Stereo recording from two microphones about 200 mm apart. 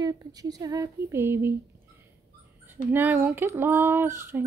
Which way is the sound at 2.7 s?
10° right (ahead or behind).